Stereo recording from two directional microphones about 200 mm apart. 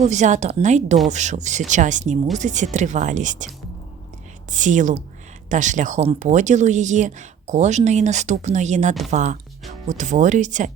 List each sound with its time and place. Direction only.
0.0 s speech: 35° right (ahead or behind)
4.5 s speech: 40° right (ahead or behind)